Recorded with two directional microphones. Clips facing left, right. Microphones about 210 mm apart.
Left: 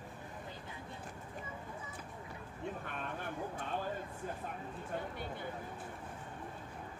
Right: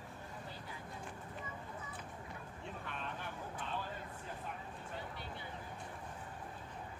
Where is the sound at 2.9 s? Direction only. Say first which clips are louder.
Left 3 dB; 50° left (ahead or behind).